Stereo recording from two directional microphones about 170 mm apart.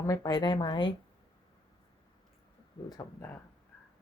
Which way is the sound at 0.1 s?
20° left (ahead or behind).